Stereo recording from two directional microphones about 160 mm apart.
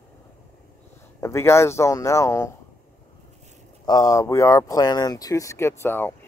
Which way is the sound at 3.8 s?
20° left (ahead or behind).